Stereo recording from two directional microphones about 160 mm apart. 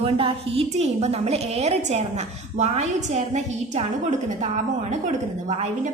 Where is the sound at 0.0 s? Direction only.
35° right (ahead or behind).